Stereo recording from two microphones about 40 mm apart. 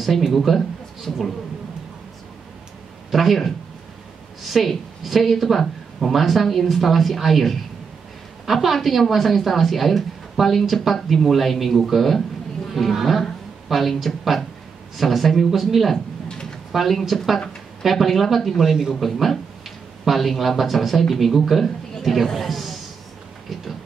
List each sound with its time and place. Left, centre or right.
0.3 s a man's voice: centre
3.1 s a woman's voice: centre
16.3 s a sound: centre
16.7 s a woman's voice: centre